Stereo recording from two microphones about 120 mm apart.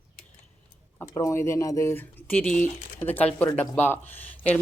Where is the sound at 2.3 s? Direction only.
10° left (ahead or behind).